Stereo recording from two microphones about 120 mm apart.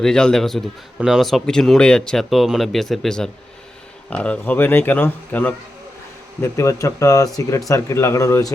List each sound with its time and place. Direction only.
0.0 s speech: 5° left (ahead or behind); by 8.5 s 25° left (ahead or behind)